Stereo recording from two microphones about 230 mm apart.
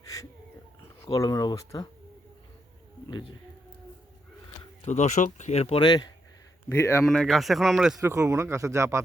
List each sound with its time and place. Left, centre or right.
1.0 s speech: centre
4.8 s speech: left; by 7.0 s centre
7.0 s speech: centre